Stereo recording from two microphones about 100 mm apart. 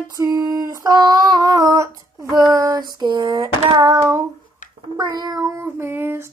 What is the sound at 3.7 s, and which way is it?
Child singing, 45° right (ahead or behind).